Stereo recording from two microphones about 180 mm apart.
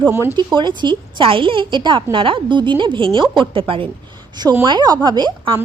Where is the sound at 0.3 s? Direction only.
25° right (ahead or behind).